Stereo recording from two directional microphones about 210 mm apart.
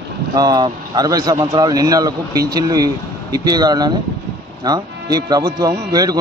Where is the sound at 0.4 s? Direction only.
20° right (ahead or behind).